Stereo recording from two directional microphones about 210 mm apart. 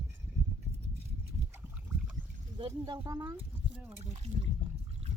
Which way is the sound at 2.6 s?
20° right (ahead or behind).